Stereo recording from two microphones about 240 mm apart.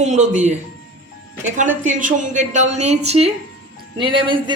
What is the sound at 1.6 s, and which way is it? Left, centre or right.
Speech, right.